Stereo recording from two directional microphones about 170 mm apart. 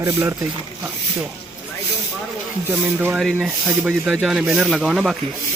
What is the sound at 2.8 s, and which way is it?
Speech, 10° right (ahead or behind).